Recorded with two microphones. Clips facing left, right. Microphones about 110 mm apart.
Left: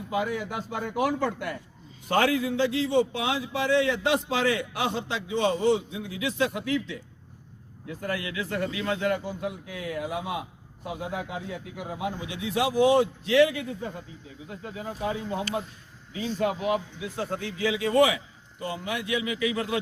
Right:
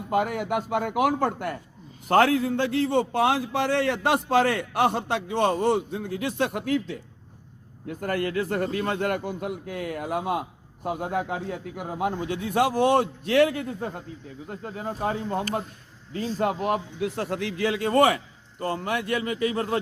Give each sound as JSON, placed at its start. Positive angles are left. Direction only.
{"t": 0.1, "sound": "a man's voice", "side_deg": -55}
{"t": 1.3, "sound": "a man's voice", "side_deg": -45}